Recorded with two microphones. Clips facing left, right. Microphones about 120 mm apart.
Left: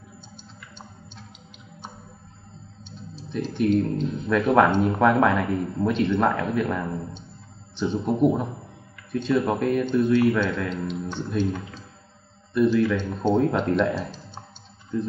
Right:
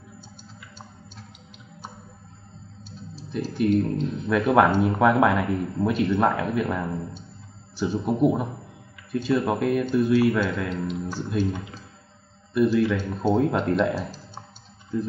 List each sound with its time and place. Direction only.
3.2 s speech: 5° right (ahead or behind)